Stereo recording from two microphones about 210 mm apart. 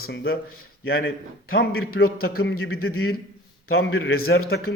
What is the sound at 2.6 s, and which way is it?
Speech, 90° left.